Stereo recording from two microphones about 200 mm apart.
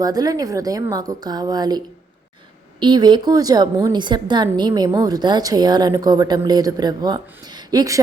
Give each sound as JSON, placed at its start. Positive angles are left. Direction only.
{"t": 0.0, "sound": "a woman's voice", "side_deg": -20}
{"t": 2.8, "sound": "a woman's voice", "side_deg": -20}